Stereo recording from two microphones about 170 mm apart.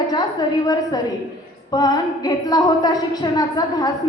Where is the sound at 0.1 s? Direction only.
25° left (ahead or behind).